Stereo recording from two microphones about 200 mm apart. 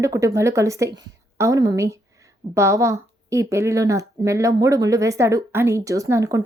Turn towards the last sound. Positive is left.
turn(degrees=-15)  # may be behind; listen again after turning